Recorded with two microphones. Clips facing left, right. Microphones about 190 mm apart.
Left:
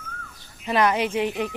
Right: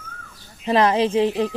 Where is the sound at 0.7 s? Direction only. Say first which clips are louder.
Right 4 dB; 30° right (ahead or behind).